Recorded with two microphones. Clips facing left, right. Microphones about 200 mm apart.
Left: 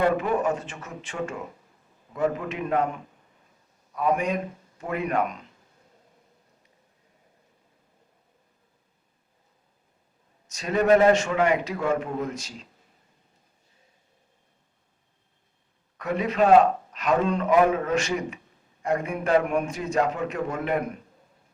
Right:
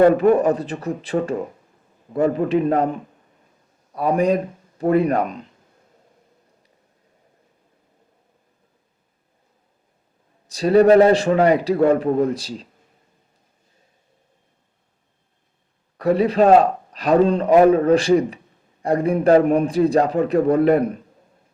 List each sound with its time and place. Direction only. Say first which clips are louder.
0.0 s a man's voice: right 9 dB; 40° right (ahead or behind)
10.4 s a man's voice: right 10 dB; 35° right (ahead or behind)
16.0 s a man's voice: right 7 dB; 35° right (ahead or behind)